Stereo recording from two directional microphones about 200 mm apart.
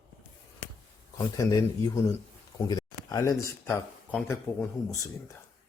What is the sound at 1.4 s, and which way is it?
Speech, 20° left (ahead or behind).